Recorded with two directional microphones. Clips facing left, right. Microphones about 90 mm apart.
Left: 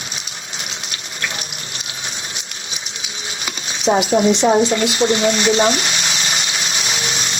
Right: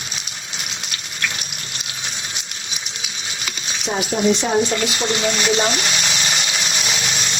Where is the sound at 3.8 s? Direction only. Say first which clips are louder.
Left 5 dB; 30° left (ahead or behind).